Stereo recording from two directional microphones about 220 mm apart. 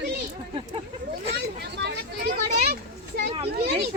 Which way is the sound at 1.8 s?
50° right (ahead or behind).